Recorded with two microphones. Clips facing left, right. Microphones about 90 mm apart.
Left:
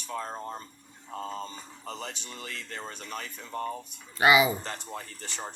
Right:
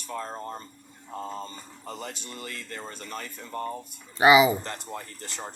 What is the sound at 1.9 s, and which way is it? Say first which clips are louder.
A woman's voice: right 2 dB; 5° right (ahead or behind).